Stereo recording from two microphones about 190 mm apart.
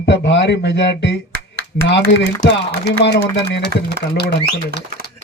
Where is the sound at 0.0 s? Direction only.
65° left (ahead or behind).